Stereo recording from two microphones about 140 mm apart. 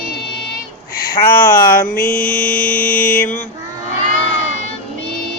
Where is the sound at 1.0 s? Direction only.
90° left.